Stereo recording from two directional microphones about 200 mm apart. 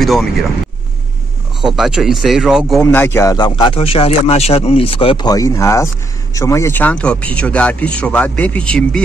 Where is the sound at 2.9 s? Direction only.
10° left (ahead or behind).